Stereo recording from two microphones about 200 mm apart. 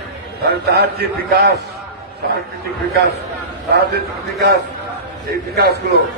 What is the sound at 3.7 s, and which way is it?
Speech, 50° right (ahead or behind).